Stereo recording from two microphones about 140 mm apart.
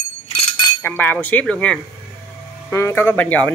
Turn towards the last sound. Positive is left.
turn(degrees=10)  # may be behind; listen again after turning